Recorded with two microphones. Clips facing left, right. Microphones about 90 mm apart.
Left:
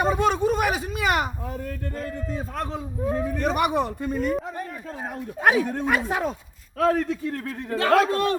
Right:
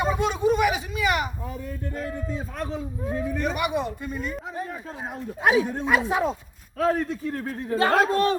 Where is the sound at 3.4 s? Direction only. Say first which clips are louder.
Left 4 dB; 40° left (ahead or behind).